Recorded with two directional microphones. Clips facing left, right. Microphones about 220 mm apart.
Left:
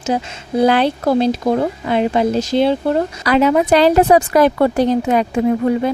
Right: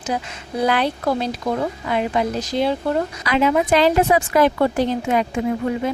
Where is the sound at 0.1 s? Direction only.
30° left (ahead or behind).